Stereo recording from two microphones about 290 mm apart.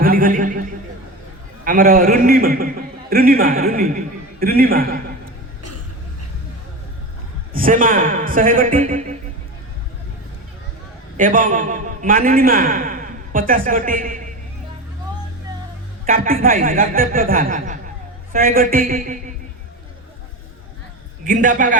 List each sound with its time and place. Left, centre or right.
0.0 s neigh: right
1.6 s a man's voice: right
7.5 s a man's voice: right
11.2 s a man's voice: right
16.0 s a man's voice: right
21.2 s a man's voice: right